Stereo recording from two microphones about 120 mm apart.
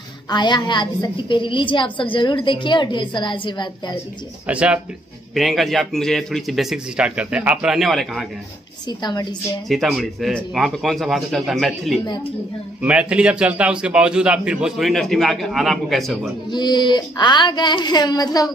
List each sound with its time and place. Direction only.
0.3 s a woman's voice: 40° left (ahead or behind)
4.5 s a man's voice: 10° right (ahead or behind)
5.3 s speech: centre (ahead or behind)
8.8 s a woman's voice: 35° left (ahead or behind)
9.7 s a man's voice: centre (ahead or behind)
16.4 s a woman's voice: 40° left (ahead or behind)